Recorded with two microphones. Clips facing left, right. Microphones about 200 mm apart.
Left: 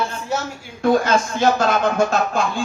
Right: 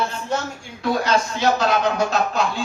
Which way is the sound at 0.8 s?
50° left (ahead or behind).